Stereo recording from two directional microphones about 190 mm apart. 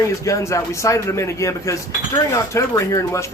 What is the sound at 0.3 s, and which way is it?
Speech, 15° left (ahead or behind).